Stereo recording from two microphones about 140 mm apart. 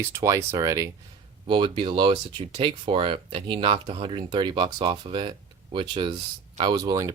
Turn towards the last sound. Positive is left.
turn(degrees=-25)  # may be behind; listen again after turning